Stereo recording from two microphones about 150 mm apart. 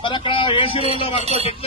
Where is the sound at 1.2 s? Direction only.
45° right (ahead or behind).